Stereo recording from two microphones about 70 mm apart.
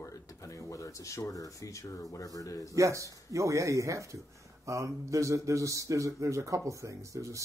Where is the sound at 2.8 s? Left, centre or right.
Right.